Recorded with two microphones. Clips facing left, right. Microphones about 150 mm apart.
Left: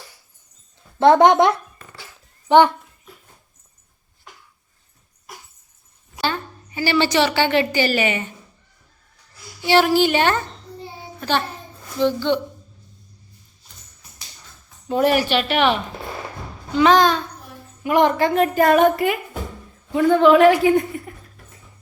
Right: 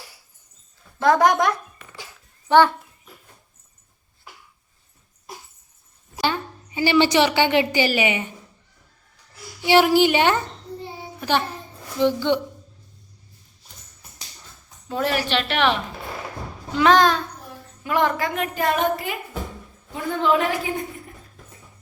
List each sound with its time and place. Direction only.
0.9 s a woman's voice: 25° left (ahead or behind)
4.3 s a sound: 5° right (ahead or behind)
6.2 s a woman's voice: 15° right (ahead or behind)
9.6 s a woman's voice: 15° right (ahead or behind)
14.8 s a woman's voice: 20° left (ahead or behind); by 17.2 s centre (ahead or behind)
17.8 s a woman's voice: 20° left (ahead or behind)
18.2 s a woman's voice: 35° left (ahead or behind); by 20.7 s 75° left (ahead or behind)